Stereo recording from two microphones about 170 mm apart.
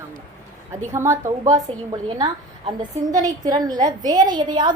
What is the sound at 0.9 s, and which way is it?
A woman's voice, 15° right (ahead or behind).